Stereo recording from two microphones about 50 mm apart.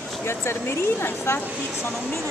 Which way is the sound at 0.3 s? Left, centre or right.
Left.